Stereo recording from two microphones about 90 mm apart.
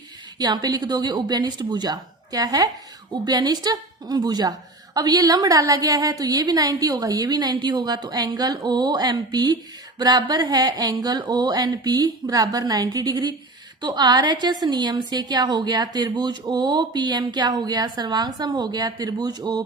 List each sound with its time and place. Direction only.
0.3 s a woman's voice: 50° right (ahead or behind)